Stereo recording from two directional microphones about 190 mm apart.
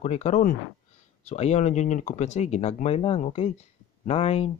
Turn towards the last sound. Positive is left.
turn(degrees=30)  # may be behind; listen again after turning